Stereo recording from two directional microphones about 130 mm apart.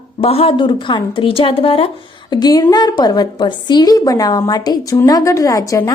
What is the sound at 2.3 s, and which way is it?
A woman's voice, 30° left (ahead or behind).